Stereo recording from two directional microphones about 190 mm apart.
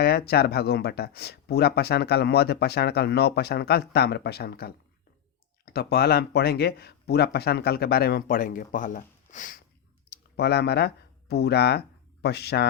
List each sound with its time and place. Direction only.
0.0 s speech: 55° left (ahead or behind)
5.7 s speech: 55° left (ahead or behind)
10.1 s speech: 60° left (ahead or behind)